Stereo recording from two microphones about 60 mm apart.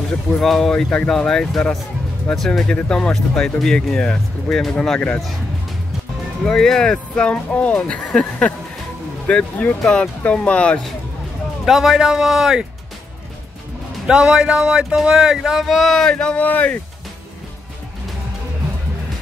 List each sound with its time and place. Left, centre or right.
0.4 s speech: centre
0.8 s speech: centre
6.4 s speech: centre
11.6 s speech: centre
14.0 s speech: centre
15.6 s speech: centre
16.4 s speech: left